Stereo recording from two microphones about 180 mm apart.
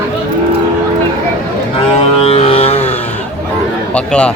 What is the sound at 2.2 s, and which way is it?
Vehicle, 35° left (ahead or behind).